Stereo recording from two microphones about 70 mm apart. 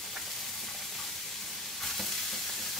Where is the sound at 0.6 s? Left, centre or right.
Centre.